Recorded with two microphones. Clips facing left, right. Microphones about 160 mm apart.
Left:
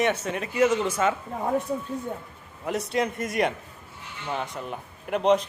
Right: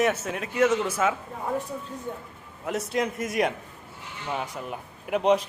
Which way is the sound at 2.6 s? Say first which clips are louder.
Left 1 dB; centre (ahead or behind).